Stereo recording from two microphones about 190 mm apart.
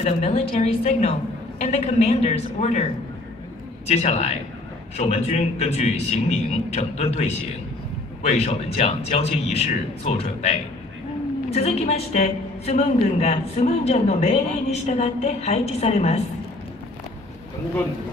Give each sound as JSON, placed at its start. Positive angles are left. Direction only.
{"t": 0.0, "sound": "a man's voice", "side_deg": 35}
{"t": 11.5, "sound": "a man's voice", "side_deg": 35}